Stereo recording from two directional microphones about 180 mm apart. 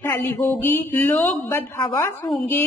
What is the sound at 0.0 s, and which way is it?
A woman's voice, 10° left (ahead or behind).